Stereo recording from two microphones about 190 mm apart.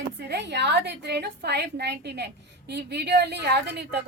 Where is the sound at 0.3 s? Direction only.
65° right (ahead or behind).